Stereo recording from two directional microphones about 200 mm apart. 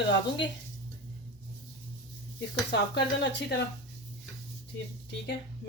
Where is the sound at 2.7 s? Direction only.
60° left (ahead or behind).